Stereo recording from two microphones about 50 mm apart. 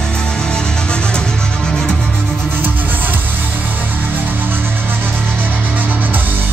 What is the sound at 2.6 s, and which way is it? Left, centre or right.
Music, right.